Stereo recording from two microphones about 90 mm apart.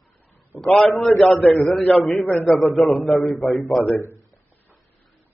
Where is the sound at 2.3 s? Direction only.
25° left (ahead or behind).